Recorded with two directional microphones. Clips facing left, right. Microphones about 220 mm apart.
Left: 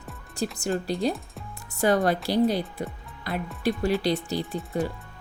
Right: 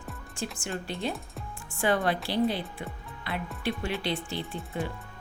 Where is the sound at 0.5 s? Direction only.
40° left (ahead or behind).